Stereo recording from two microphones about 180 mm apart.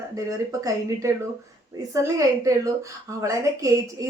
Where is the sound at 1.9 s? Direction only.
15° right (ahead or behind).